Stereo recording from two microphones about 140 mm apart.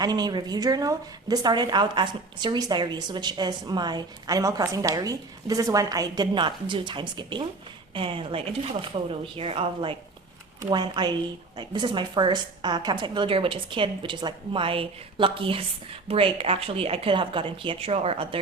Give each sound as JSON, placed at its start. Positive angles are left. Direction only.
{"t": 0.0, "sound": "a woman's voice", "side_deg": -30}
{"t": 10.6, "sound": "a woman's voice", "side_deg": -30}